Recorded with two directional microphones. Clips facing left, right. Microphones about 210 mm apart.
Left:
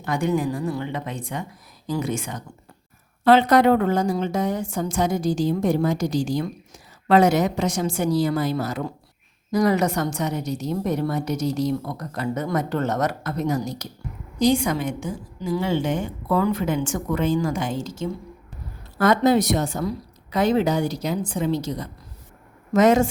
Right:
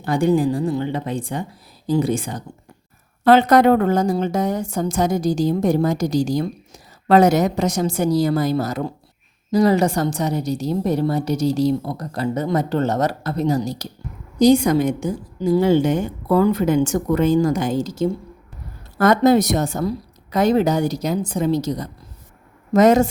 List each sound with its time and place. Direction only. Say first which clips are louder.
0.0 s a woman's voice: right 5 dB; 30° right (ahead or behind)
3.2 s a woman's voice: right 3 dB; 45° right (ahead or behind)